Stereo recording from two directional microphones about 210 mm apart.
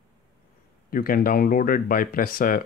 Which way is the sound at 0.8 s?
40° left (ahead or behind).